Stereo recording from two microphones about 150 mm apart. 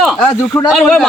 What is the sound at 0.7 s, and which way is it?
Speech, centre (ahead or behind).